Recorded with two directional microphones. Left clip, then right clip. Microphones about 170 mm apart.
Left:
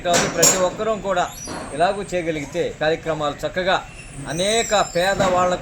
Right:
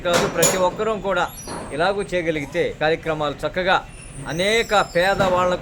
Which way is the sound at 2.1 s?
35° right (ahead or behind).